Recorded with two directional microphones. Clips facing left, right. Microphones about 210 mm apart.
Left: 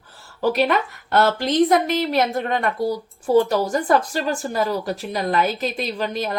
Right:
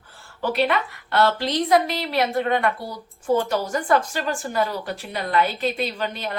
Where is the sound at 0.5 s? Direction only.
40° left (ahead or behind).